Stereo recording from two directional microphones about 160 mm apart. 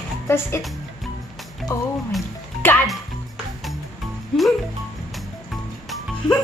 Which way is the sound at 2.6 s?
10° left (ahead or behind).